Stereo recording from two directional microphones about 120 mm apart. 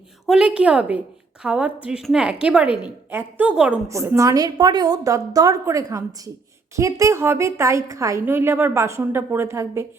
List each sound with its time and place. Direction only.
0.3 s a woman's voice: 10° right (ahead or behind)
3.8 s a woman's voice: 25° right (ahead or behind)